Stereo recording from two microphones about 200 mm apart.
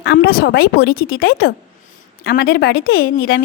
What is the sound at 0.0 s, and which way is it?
A woman's voice, 50° left (ahead or behind).